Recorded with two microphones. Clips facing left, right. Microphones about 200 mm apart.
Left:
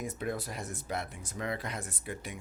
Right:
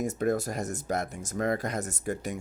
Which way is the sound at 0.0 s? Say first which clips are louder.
Right 8 dB; 45° right (ahead or behind).